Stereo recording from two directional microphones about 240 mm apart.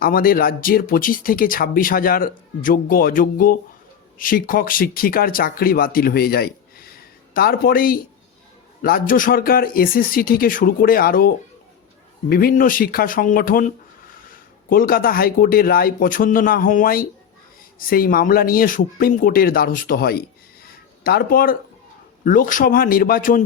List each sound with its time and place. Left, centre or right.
0.0 s speech: left
20.7 s a sound: left
22.2 s speech: left